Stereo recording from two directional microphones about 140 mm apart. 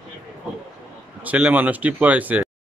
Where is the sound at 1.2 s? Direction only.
10° right (ahead or behind).